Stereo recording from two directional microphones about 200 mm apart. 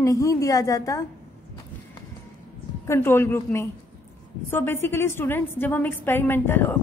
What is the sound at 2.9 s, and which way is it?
A woman's voice, 10° left (ahead or behind).